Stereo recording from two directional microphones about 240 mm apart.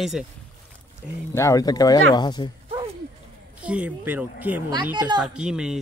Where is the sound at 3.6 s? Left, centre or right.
Centre.